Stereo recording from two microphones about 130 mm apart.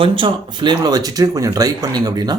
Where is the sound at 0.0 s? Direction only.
40° right (ahead or behind).